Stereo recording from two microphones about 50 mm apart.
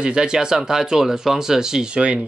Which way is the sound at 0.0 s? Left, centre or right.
Centre.